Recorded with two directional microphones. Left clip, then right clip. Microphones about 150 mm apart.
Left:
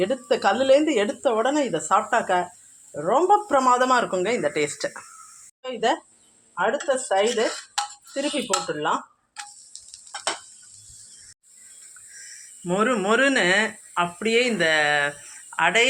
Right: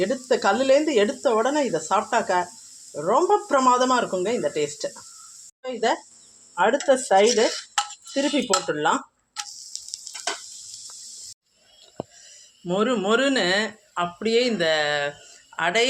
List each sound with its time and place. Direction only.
0.0 s speech: 5° right (ahead or behind)
6.5 s speech: 45° right (ahead or behind)
8.6 s speech: 40° right (ahead or behind)
9.7 s sizzle: centre (ahead or behind)
12.6 s speech: 10° right (ahead or behind)